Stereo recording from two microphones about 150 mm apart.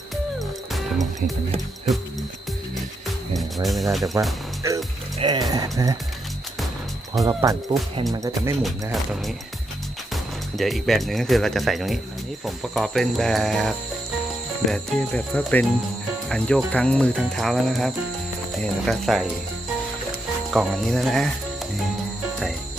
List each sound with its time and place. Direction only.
0.3 s music: centre (ahead or behind)
3.3 s music: centre (ahead or behind)
4.1 s speech: 20° right (ahead or behind)
7.3 s speech: 20° right (ahead or behind)
10.6 s speech: centre (ahead or behind)
20.5 s speech: centre (ahead or behind)